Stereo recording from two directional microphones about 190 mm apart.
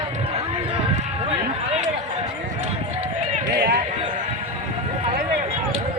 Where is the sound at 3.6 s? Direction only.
60° right (ahead or behind).